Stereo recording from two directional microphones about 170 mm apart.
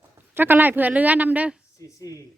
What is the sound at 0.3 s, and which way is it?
A woman's voice, 10° right (ahead or behind).